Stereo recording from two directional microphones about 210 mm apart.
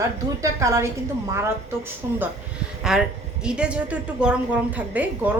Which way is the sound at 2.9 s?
Centre (ahead or behind).